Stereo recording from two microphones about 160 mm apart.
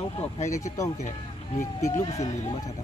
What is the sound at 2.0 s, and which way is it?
Speech, 20° left (ahead or behind).